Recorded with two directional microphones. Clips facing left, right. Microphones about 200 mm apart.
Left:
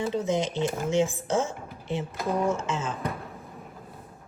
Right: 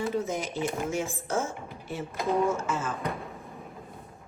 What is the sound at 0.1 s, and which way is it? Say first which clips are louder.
Speech: left 3 dB; 20° left (ahead or behind).